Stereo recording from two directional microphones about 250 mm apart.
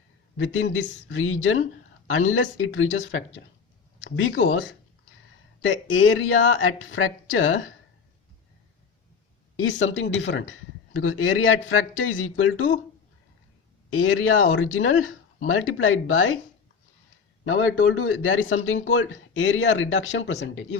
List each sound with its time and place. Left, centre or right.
0.3 s speech: left
5.6 s speech: left
9.6 s speech: left
13.9 s speech: left
17.4 s speech: left